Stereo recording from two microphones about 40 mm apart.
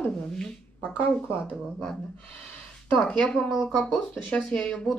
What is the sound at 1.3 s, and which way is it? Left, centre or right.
Speech, left.